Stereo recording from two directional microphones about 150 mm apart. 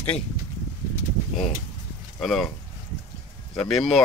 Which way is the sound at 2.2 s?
Centre (ahead or behind).